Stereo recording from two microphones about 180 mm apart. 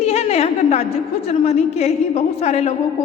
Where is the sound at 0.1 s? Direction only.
35° left (ahead or behind).